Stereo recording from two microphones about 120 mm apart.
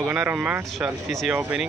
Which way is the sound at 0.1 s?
10° right (ahead or behind).